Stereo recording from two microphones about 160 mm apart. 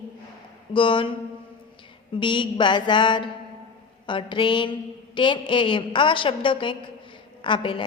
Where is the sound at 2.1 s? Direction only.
30° left (ahead or behind).